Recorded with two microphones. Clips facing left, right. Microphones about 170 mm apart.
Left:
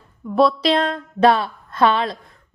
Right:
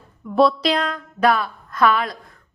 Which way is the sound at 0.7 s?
30° left (ahead or behind).